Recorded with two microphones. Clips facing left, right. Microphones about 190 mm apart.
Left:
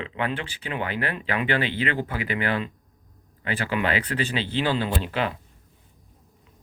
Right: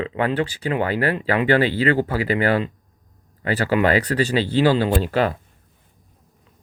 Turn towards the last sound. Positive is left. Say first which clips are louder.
# right 7 dB
turn(degrees=-40)  # may be behind; listen again after turning